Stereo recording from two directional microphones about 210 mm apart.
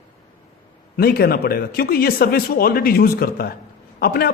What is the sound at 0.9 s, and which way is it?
A man's voice, 45° left (ahead or behind).